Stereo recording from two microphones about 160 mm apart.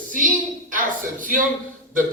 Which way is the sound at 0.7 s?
60° right (ahead or behind).